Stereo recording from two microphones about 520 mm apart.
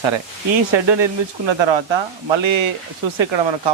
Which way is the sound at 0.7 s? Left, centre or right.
Right.